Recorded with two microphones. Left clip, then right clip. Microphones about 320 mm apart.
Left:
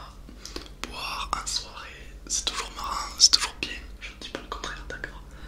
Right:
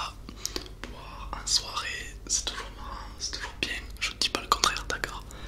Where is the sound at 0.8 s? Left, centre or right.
Centre.